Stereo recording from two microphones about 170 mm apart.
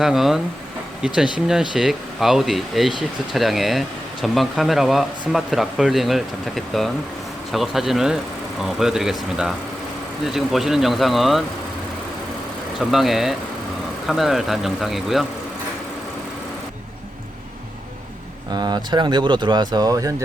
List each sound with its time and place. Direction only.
0.0 s speech: centre (ahead or behind)
12.8 s speech: centre (ahead or behind)
18.5 s speech: 25° right (ahead or behind)